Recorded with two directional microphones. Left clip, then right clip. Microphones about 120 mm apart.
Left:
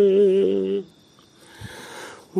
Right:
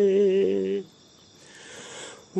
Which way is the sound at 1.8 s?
25° left (ahead or behind).